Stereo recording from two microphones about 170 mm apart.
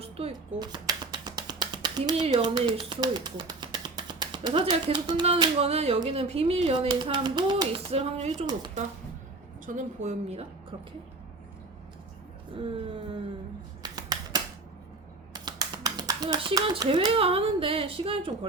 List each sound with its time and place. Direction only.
0.0 s finger snapping: 35° right (ahead or behind)
2.2 s speech: 30° right (ahead or behind)
9.6 s a woman's voice: 45° right (ahead or behind)
12.5 s speech: 35° right (ahead or behind)
13.8 s scissors: 25° right (ahead or behind)
15.3 s a sound: 25° right (ahead or behind)
17.1 s speech: 35° right (ahead or behind)